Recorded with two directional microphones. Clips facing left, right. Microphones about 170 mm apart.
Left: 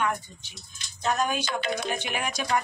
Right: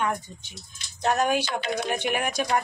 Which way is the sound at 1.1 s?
65° right (ahead or behind).